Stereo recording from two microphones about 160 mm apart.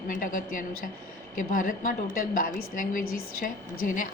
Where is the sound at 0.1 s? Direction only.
55° left (ahead or behind).